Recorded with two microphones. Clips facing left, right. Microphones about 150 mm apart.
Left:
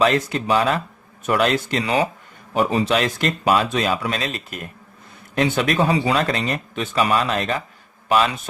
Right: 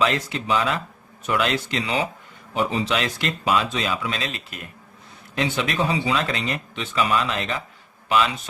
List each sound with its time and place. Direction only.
0.0 s speech: 45° left (ahead or behind)